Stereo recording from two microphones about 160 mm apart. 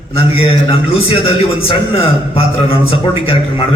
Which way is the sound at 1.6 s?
35° left (ahead or behind).